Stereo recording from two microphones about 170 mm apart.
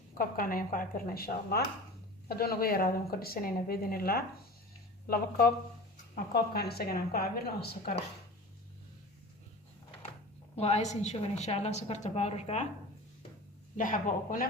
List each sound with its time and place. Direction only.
0.1 s a woman's voice: 55° left (ahead or behind)
6.3 s a woman's voice: 65° left (ahead or behind)
10.5 s a woman's voice: 40° left (ahead or behind)
13.7 s a woman's voice: 50° left (ahead or behind)